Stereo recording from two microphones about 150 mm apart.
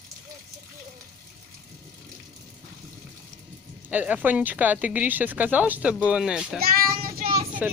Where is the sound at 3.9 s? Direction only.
10° right (ahead or behind).